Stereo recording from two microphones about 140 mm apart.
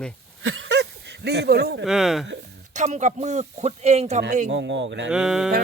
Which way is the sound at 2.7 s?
55° right (ahead or behind).